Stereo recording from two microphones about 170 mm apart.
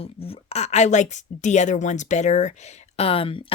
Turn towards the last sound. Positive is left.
turn(degrees=35)  # may be behind; listen again after turning